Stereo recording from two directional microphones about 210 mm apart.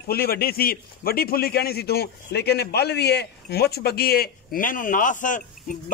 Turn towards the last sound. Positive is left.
turn(degrees=40)  # may be behind; listen again after turning